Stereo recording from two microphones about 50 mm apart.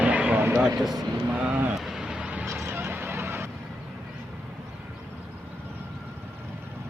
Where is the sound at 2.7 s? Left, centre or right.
Right.